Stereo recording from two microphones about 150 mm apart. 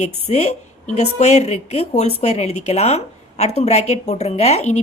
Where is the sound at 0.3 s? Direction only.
45° left (ahead or behind).